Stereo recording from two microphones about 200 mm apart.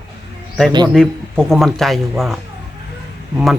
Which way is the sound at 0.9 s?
5° left (ahead or behind).